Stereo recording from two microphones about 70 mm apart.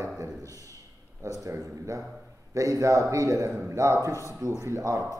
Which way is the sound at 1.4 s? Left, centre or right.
Right.